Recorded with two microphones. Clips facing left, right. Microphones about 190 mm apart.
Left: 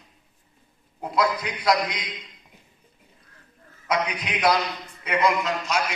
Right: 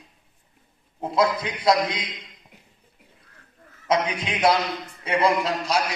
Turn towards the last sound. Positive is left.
turn(degrees=-35)  # may be behind; listen again after turning